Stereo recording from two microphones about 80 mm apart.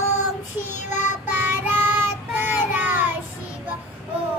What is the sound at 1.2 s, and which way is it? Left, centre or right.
Child singing, right.